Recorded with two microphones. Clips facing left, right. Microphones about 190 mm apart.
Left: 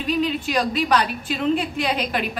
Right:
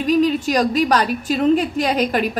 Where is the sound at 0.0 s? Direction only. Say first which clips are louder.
Right 6 dB; 40° right (ahead or behind).